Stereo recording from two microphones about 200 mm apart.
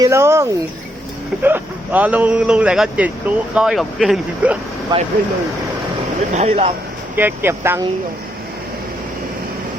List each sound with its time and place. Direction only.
0.0 s a man's voice: 15° right (ahead or behind)
4.9 s speech: 20° right (ahead or behind)
6.3 s speech: 30° right (ahead or behind)
7.2 s a man's voice: 10° right (ahead or behind)